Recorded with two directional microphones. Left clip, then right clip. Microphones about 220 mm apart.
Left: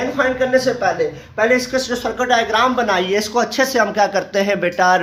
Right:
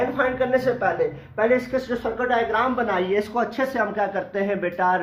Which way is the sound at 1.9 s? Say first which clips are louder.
Left 5 dB; 20° left (ahead or behind).